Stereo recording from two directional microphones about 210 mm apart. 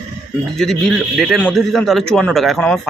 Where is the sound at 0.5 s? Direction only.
Centre (ahead or behind).